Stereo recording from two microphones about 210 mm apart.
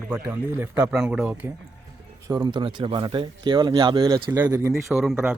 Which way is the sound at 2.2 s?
20° right (ahead or behind).